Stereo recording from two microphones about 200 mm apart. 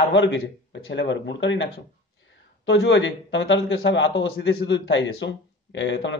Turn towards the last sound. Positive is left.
turn(degrees=65)  # may be behind; listen again after turning